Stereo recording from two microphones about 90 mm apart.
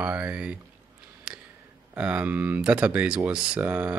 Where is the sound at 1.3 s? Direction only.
10° right (ahead or behind).